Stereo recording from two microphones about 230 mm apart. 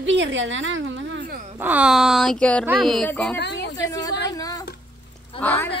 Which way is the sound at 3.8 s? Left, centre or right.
Centre.